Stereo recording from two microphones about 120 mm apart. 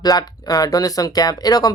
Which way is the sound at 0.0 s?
35° left (ahead or behind).